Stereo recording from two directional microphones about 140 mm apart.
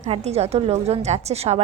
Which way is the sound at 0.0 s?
50° right (ahead or behind).